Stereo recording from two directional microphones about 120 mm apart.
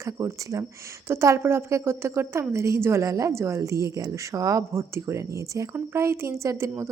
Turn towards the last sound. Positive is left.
turn(degrees=-20)  # may be behind; listen again after turning